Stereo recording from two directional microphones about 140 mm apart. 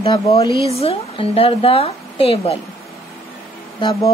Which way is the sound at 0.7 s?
45° left (ahead or behind).